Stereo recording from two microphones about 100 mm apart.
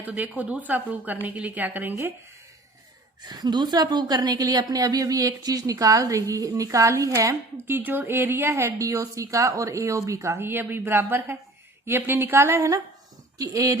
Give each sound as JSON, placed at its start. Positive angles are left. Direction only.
{"t": 0.0, "sound": "a woman's voice", "side_deg": -15}
{"t": 3.2, "sound": "a woman's voice", "side_deg": -45}
{"t": 7.7, "sound": "a woman's voice", "side_deg": -20}